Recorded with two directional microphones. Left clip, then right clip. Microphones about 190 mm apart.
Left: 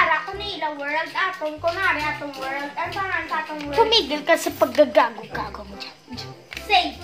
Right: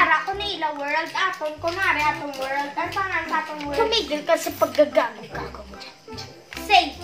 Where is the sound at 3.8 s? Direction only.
55° left (ahead or behind).